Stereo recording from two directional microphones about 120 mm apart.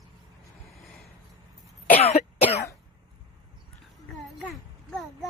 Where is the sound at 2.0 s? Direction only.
60° left (ahead or behind).